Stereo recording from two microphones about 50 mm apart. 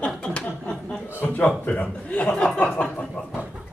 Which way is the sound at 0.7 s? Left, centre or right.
Centre.